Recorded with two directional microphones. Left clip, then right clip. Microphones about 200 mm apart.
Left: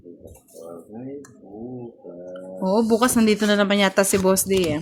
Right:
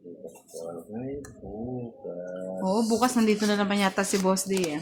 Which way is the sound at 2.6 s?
45° left (ahead or behind).